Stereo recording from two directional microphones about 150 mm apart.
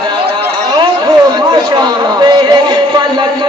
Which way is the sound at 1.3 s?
30° right (ahead or behind).